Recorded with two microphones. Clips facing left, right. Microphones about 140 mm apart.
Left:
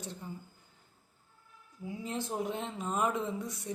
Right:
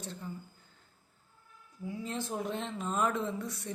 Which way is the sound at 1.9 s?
15° left (ahead or behind).